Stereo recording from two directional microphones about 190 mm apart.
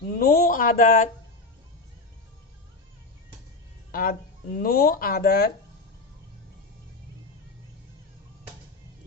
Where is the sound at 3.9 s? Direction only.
50° left (ahead or behind).